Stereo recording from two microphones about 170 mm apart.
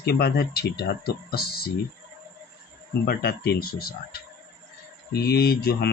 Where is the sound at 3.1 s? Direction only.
70° left (ahead or behind).